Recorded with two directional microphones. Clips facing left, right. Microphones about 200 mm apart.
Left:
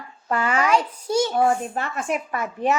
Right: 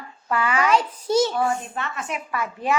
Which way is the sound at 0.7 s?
10° left (ahead or behind).